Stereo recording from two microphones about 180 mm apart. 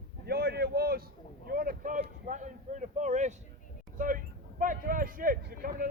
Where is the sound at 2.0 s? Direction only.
45° right (ahead or behind).